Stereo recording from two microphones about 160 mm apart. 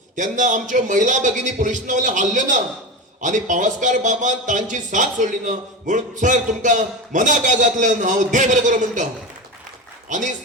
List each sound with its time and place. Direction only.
0.2 s a man's voice: 50° right (ahead or behind)
10.1 s a man's voice: 50° right (ahead or behind)